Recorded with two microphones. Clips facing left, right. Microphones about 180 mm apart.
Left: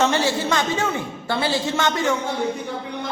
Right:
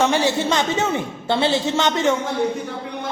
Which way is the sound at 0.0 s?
15° right (ahead or behind).